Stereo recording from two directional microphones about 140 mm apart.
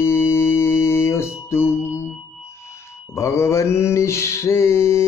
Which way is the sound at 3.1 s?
20° left (ahead or behind).